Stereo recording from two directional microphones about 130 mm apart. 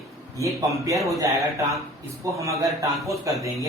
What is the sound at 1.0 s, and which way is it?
Speech, 25° right (ahead or behind).